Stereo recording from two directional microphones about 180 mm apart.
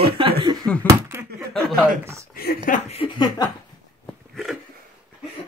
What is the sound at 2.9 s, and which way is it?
Chuckle, 30° left (ahead or behind).